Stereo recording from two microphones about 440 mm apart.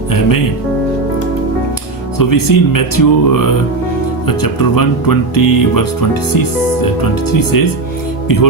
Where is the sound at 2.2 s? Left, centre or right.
Left.